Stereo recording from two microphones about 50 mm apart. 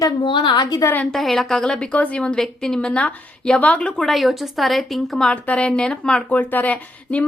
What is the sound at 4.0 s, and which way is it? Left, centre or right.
Speech, centre.